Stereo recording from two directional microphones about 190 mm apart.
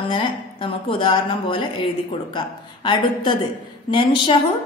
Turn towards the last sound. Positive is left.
turn(degrees=25)  # may be behind; listen again after turning